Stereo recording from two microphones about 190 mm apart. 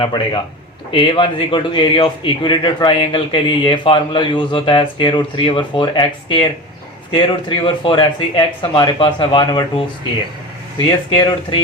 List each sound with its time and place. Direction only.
0.9 s a man's voice: 30° left (ahead or behind)
10.8 s a man's voice: 25° left (ahead or behind)